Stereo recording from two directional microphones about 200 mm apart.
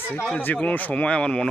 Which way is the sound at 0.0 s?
10° left (ahead or behind).